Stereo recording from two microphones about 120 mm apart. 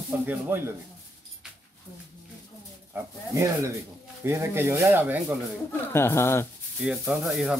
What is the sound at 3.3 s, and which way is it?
Speech, 25° right (ahead or behind).